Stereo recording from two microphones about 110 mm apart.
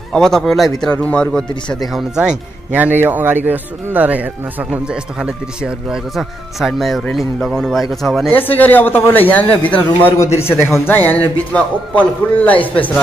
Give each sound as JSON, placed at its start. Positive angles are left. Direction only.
{"t": 0.1, "sound": "a man's voice", "side_deg": 5}
{"t": 1.9, "sound": "speech", "side_deg": -5}
{"t": 8.3, "sound": "a man's voice", "side_deg": 15}
{"t": 10.1, "sound": "a man's voice", "side_deg": 25}